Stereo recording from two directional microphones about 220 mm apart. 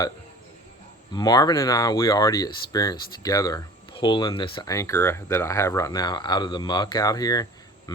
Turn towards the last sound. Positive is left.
turn(degrees=15)  # may be behind; listen again after turning